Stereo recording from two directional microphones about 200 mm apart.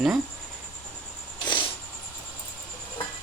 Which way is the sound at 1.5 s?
25° left (ahead or behind).